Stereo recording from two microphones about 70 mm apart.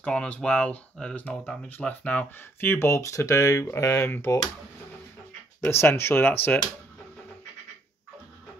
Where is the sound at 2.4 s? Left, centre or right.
Left.